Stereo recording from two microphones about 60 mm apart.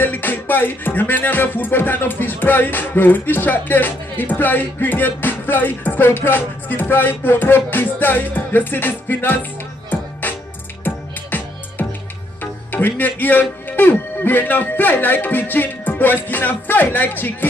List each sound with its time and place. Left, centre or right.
0.0 s music: left
12.7 s music: left